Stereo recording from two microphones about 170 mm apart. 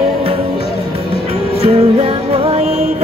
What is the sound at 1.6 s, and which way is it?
Music, 35° right (ahead or behind).